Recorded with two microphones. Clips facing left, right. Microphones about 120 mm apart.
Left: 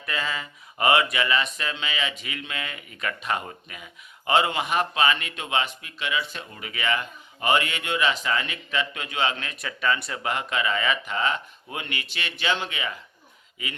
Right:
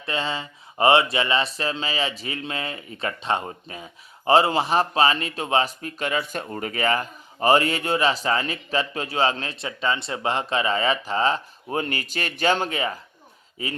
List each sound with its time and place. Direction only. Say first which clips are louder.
0.0 s speech: right 3 dB; 30° right (ahead or behind)